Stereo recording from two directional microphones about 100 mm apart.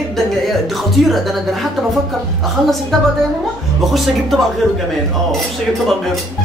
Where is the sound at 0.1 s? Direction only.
Centre (ahead or behind).